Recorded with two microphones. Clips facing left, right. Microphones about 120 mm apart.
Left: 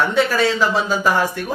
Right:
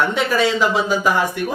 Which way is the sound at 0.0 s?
15° right (ahead or behind).